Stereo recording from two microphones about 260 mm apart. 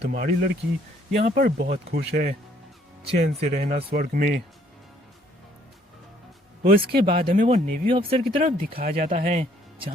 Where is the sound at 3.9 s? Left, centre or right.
Right.